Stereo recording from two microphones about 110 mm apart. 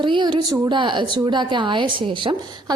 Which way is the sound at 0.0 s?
45° right (ahead or behind).